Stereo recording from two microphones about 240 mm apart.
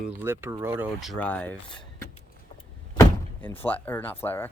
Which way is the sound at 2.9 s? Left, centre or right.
Centre.